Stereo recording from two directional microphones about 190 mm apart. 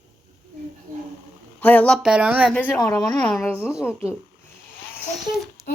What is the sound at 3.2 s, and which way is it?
Speech, 10° left (ahead or behind).